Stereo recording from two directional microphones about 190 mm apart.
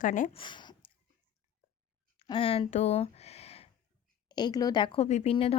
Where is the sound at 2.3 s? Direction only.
30° left (ahead or behind).